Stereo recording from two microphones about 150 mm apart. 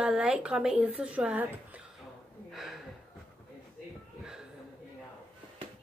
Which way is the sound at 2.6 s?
Centre (ahead or behind).